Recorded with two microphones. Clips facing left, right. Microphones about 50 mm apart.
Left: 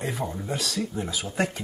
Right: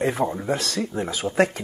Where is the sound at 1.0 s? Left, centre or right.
Right.